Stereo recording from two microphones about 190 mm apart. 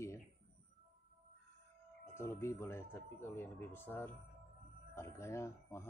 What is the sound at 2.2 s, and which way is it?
Speech, 15° left (ahead or behind).